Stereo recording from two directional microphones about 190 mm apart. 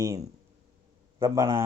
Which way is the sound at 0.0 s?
15° right (ahead or behind).